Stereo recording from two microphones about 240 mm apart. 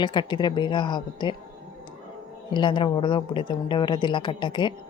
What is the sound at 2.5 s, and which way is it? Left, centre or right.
A woman's voice, centre.